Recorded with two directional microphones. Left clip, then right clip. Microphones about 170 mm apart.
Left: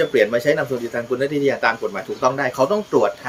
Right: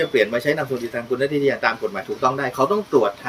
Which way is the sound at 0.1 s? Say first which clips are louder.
Left 2 dB; 35° left (ahead or behind).